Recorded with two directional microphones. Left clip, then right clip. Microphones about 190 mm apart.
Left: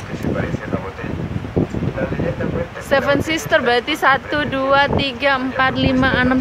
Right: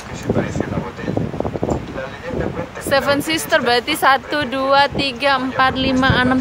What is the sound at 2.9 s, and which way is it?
Speech, 10° right (ahead or behind).